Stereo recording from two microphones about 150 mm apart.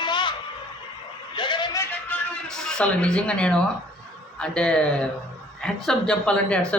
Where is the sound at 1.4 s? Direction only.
30° left (ahead or behind).